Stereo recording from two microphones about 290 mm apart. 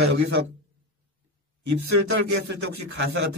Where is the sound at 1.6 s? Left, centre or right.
Right.